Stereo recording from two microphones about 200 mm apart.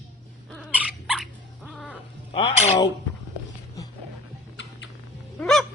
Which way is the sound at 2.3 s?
25° left (ahead or behind).